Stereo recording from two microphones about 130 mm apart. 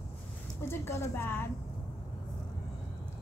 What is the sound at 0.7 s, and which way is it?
Speech, 20° left (ahead or behind).